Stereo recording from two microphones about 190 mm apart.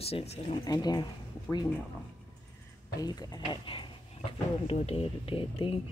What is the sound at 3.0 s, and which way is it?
Speech, 20° left (ahead or behind).